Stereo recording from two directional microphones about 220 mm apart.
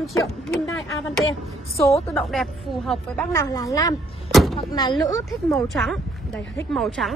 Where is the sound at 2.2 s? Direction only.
Centre (ahead or behind); by 5.0 s 20° left (ahead or behind).